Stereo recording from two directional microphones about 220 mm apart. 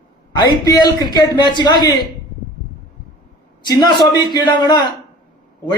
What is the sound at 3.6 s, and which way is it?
A man's voice, 20° left (ahead or behind).